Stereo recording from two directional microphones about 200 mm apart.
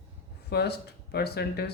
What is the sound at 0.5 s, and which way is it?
Speech, 55° left (ahead or behind).